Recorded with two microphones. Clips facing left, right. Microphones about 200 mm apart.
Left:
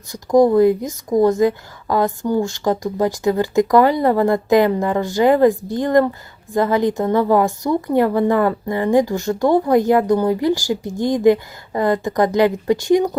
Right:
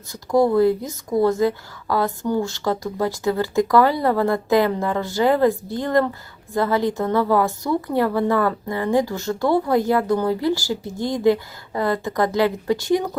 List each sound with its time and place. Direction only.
0.1 s a woman's voice: 20° left (ahead or behind)